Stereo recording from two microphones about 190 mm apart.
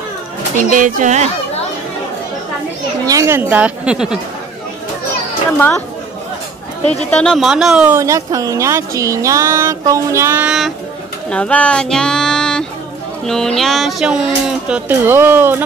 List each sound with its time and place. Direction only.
0.6 s speech: 45° right (ahead or behind)
3.1 s speech: 15° right (ahead or behind)
7.1 s speech: 5° left (ahead or behind); by 15.5 s 10° right (ahead or behind)